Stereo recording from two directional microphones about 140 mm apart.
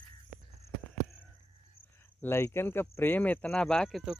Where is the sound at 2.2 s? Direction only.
15° left (ahead or behind); by 4.1 s centre (ahead or behind).